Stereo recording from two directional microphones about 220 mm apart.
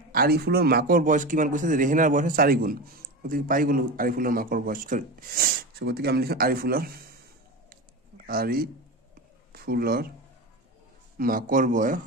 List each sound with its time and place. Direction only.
0.1 s a man's voice: 45° right (ahead or behind)
8.3 s a man's voice: 45° right (ahead or behind)
11.1 s a man's voice: 40° right (ahead or behind)